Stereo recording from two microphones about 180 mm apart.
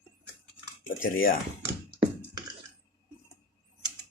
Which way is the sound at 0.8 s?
50° left (ahead or behind).